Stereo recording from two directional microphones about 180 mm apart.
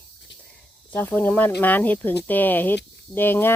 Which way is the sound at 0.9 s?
10° left (ahead or behind).